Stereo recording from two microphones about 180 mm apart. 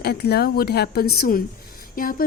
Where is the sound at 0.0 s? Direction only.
65° left (ahead or behind).